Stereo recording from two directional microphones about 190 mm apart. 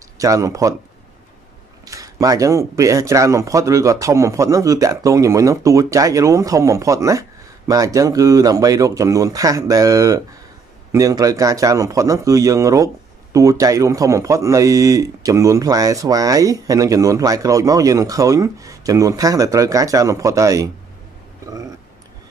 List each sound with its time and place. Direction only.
0.2 s a man's voice: 15° right (ahead or behind)
1.9 s a man's voice: 20° right (ahead or behind)